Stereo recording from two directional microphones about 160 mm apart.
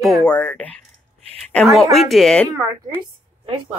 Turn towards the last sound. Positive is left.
turn(degrees=-30)  # may be behind; listen again after turning